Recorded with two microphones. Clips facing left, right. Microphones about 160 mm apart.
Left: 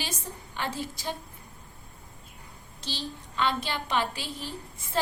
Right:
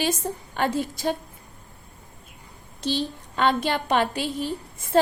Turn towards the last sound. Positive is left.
turn(degrees=-55)  # may be behind; listen again after turning